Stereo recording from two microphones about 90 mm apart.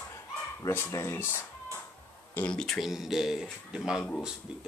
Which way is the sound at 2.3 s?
15° left (ahead or behind).